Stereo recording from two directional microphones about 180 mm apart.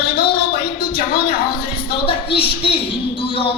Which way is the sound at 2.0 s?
30° left (ahead or behind).